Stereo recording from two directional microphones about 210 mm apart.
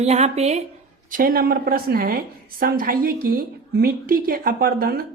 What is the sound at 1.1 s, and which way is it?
A woman's voice, 45° right (ahead or behind).